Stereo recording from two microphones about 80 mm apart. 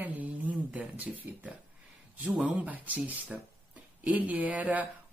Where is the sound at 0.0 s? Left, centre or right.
Centre.